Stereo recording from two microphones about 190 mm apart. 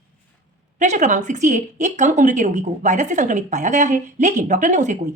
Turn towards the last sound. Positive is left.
turn(degrees=-40)  # may be behind; listen again after turning